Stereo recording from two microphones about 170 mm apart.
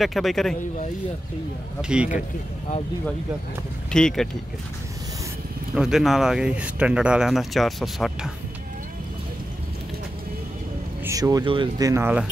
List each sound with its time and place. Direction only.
0.0 s speech: centre (ahead or behind)
1.8 s speech: 5° right (ahead or behind)
3.9 s speech: 5° left (ahead or behind)
5.8 s speech: centre (ahead or behind)
11.1 s speech: 20° right (ahead or behind)
11.9 s speech: 10° right (ahead or behind)